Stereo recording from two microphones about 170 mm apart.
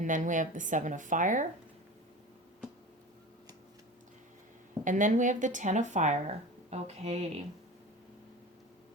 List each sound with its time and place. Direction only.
0.0 s speech: 50° right (ahead or behind)
4.8 s speech: 50° right (ahead or behind)